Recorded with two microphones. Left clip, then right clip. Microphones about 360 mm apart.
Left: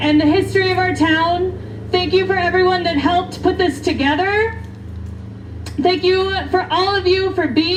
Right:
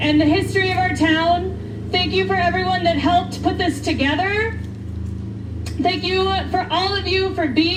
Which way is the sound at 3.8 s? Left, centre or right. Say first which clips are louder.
Left 1 dB; left.